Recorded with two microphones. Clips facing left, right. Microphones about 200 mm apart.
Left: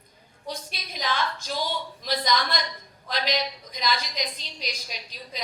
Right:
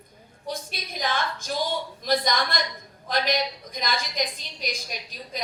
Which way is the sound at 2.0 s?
50° right (ahead or behind).